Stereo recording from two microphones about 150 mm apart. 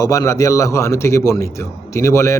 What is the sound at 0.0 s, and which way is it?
A man's voice, 20° left (ahead or behind).